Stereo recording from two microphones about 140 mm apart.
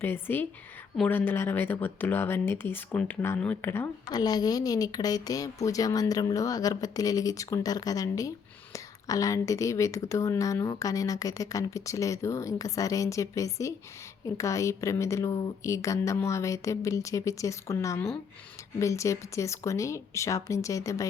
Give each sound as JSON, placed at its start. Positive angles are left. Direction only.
{"t": 0.0, "sound": "speech", "side_deg": 15}
{"t": 4.1, "sound": "speech", "side_deg": 30}